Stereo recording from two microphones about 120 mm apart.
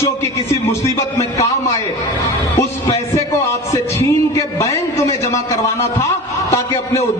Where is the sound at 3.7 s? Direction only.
25° left (ahead or behind).